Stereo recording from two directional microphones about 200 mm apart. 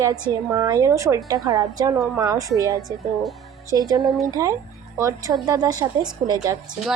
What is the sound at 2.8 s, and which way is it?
Speech, centre (ahead or behind).